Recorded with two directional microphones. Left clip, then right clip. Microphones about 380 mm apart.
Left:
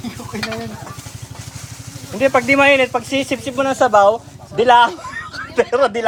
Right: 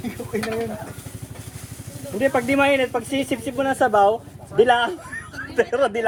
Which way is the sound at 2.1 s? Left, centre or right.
Left.